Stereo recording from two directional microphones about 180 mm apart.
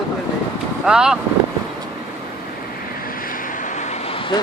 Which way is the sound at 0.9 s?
5° right (ahead or behind).